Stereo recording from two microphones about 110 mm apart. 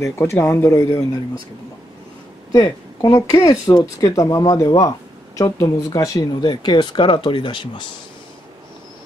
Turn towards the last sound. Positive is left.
turn(degrees=50)  # may be behind; listen again after turning